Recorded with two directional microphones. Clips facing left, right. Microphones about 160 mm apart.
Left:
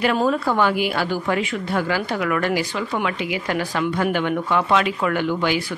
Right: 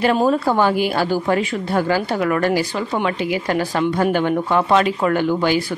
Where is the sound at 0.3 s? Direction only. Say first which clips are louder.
Right 3 dB; 35° right (ahead or behind).